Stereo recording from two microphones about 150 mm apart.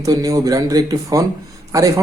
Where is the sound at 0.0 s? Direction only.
25° right (ahead or behind).